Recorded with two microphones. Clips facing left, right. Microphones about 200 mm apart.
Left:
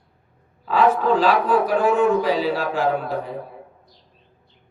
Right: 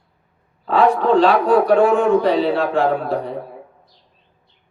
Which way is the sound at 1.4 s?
65° right (ahead or behind).